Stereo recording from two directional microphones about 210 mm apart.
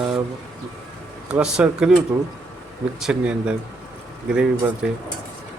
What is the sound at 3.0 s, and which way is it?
Speech, 5° right (ahead or behind).